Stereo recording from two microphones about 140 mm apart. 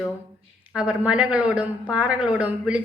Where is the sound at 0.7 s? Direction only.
10° right (ahead or behind).